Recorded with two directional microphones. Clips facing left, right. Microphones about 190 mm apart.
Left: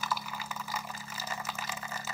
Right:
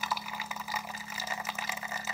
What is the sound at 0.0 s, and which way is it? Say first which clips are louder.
Water: left 1 dB; 5° right (ahead or behind).